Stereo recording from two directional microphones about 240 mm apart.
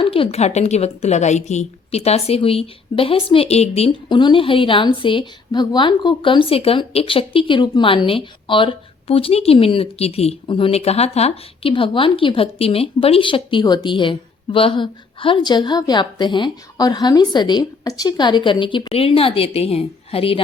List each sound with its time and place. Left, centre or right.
0.0 s a woman's voice: left